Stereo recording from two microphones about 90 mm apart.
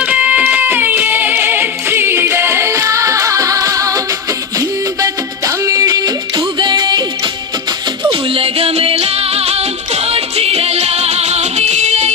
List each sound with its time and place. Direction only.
0.0 s music: 15° right (ahead or behind); by 7.0 s 50° right (ahead or behind)
8.1 s music: 90° right